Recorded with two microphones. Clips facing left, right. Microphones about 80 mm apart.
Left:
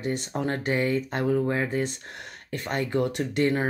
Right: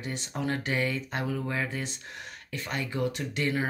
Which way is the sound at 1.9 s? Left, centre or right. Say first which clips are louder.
Left 2 dB; left.